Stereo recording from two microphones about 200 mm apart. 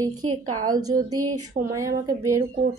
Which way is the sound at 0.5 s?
90° right.